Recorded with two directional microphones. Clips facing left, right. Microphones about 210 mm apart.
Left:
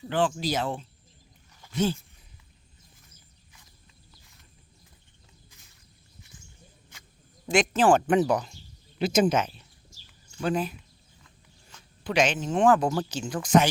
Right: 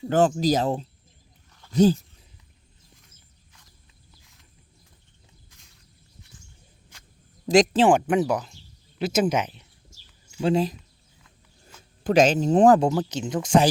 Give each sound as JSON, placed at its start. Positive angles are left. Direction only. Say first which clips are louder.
{"t": 0.1, "sound": "speech", "louder": "right 6 dB", "side_deg": -45}
{"t": 4.2, "sound": "a sound", "louder": "even", "side_deg": 0}
{"t": 7.4, "sound": "speech", "louder": "right 6 dB", "side_deg": -40}
{"t": 7.9, "sound": "speech", "louder": "right 1 dB", "side_deg": -10}
{"t": 10.4, "sound": "speech", "louder": "right 5 dB", "side_deg": -30}
{"t": 12.0, "sound": "speech", "louder": "right 7 dB", "side_deg": -40}
{"t": 12.9, "sound": "speech", "louder": "right 4 dB", "side_deg": -20}